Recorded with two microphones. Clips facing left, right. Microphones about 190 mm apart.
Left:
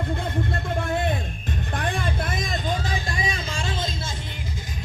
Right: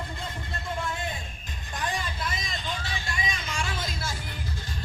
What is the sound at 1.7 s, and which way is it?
Vehicle, 55° left (ahead or behind).